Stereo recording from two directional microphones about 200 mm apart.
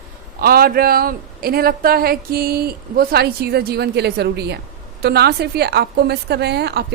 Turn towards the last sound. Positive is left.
turn(degrees=-55)  # may be behind; listen again after turning